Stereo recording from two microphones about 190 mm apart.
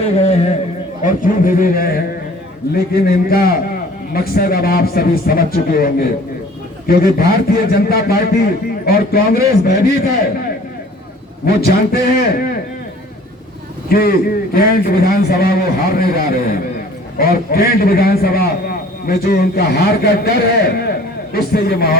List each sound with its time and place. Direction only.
0.2 s a sound: 35° left (ahead or behind)
1.0 s a man's voice: 45° left (ahead or behind)
11.4 s a man's voice: 55° left (ahead or behind)
13.9 s a man's voice: 55° left (ahead or behind)